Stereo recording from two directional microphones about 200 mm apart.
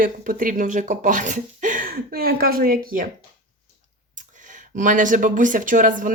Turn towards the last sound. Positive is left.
turn(degrees=-40)  # may be behind; listen again after turning